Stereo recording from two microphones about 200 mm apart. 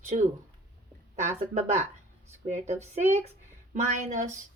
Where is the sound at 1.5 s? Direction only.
35° right (ahead or behind).